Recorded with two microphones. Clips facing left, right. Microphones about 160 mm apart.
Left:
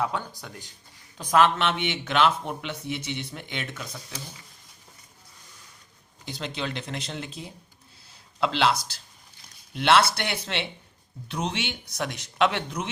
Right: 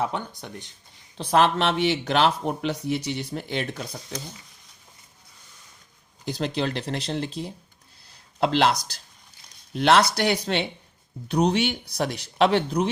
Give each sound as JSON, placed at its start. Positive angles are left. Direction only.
{"t": 0.0, "sound": "speech", "side_deg": -20}
{"t": 1.2, "sound": "speech", "side_deg": -30}
{"t": 6.2, "sound": "speech", "side_deg": -40}